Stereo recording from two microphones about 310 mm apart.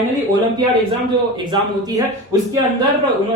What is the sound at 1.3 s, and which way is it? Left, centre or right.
A man's voice, centre.